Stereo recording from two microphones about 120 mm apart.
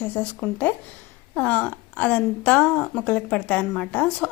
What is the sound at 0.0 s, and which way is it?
A woman's voice, 10° left (ahead or behind).